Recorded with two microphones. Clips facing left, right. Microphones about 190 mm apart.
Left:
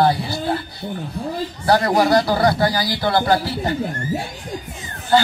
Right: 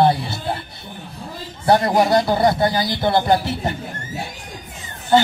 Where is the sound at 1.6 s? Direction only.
25° right (ahead or behind).